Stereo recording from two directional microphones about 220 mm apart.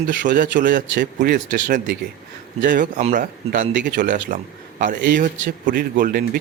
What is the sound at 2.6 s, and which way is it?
Speech, 40° right (ahead or behind).